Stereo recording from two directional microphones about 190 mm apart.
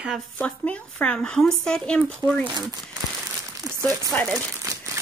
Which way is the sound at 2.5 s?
20° right (ahead or behind).